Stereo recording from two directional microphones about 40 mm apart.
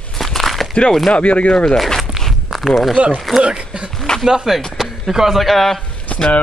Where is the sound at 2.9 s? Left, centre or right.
Right.